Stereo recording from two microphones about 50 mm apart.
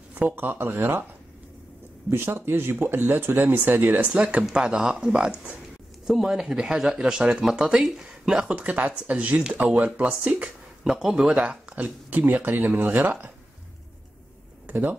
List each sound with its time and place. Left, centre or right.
0.1 s speech: right
2.0 s speech: right
4.1 s speech: right
7.4 s speech: centre; by 9.4 s right
9.4 s speech: right
10.8 s speech: centre
11.7 s speech: right
14.7 s speech: right